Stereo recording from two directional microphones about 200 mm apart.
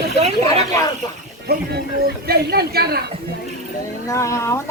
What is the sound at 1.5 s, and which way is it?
A man's voice, 50° right (ahead or behind).